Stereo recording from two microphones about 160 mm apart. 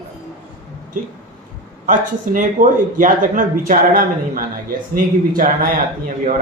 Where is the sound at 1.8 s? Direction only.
55° right (ahead or behind).